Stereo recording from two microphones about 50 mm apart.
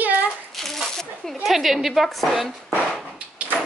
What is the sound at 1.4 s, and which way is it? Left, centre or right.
A woman's voice, centre.